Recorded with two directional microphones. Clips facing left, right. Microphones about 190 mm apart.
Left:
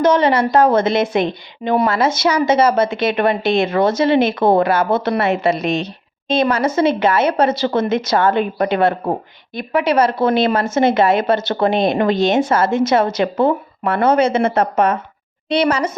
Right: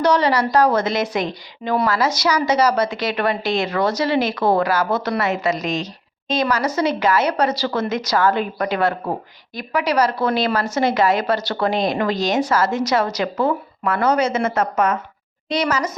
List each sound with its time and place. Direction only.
0.0 s a woman's voice: 20° left (ahead or behind)
5.5 s a woman's voice: 60° left (ahead or behind)
6.2 s a woman's voice: 25° left (ahead or behind)